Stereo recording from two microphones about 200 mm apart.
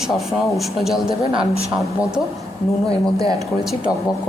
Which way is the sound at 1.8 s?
5° right (ahead or behind).